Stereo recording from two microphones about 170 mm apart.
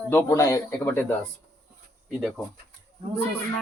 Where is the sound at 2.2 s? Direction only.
Centre (ahead or behind).